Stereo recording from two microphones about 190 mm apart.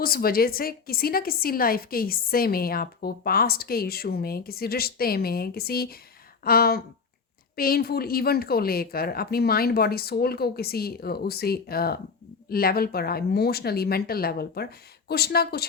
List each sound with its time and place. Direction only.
0.0 s a woman's voice: 50° left (ahead or behind)